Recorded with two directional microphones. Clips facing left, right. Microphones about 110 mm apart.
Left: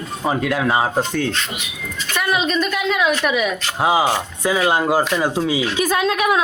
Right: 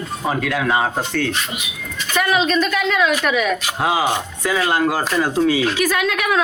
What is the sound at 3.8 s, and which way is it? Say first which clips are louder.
Speech: left 2 dB; 20° left (ahead or behind).